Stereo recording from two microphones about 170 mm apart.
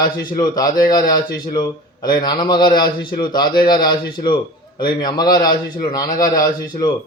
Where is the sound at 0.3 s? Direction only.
25° left (ahead or behind).